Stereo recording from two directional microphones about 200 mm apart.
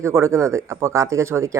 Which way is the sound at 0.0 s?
15° right (ahead or behind).